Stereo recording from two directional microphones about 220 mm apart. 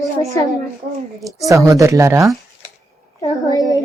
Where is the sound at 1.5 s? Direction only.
15° right (ahead or behind).